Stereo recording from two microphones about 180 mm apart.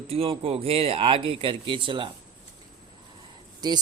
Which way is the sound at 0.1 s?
30° right (ahead or behind).